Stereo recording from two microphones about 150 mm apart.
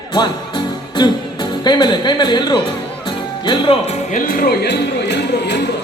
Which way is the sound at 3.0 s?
35° left (ahead or behind).